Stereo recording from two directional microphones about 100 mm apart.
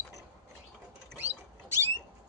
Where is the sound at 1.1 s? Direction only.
20° right (ahead or behind).